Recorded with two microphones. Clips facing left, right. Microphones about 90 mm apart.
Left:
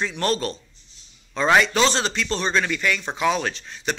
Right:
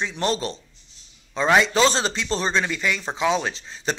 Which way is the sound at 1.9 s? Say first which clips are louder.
Even; 35° right (ahead or behind).